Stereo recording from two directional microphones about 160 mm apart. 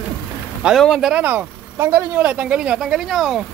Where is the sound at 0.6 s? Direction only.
Centre (ahead or behind).